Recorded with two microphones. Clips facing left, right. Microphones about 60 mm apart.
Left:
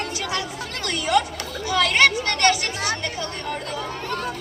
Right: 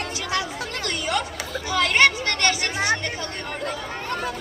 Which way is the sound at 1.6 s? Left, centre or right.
Right.